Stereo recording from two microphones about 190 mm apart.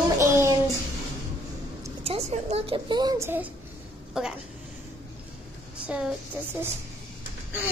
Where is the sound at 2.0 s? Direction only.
30° right (ahead or behind); by 4.3 s 5° right (ahead or behind).